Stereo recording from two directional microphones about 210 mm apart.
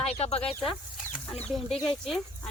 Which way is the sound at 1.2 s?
5° left (ahead or behind).